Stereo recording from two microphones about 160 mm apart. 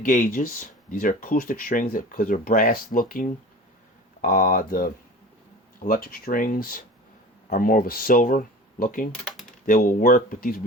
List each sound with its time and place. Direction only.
0.0 s speech: 55° left (ahead or behind)